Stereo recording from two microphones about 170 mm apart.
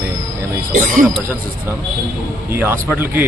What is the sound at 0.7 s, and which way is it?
Speech, 50° right (ahead or behind).